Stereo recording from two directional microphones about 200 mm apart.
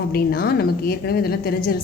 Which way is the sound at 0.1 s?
50° left (ahead or behind).